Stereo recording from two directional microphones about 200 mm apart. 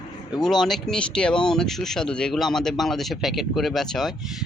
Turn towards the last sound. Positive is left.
turn(degrees=0)  # may be behind; listen again after turning